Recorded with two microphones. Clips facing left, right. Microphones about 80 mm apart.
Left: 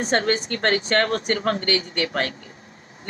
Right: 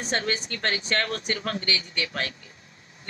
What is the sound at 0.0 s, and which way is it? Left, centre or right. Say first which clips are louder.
A man's voice: left 7 dB; left.